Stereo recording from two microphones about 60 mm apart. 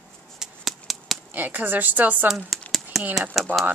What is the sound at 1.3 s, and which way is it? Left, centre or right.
Speech, right.